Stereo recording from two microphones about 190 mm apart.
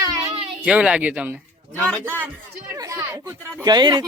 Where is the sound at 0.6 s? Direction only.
5° right (ahead or behind).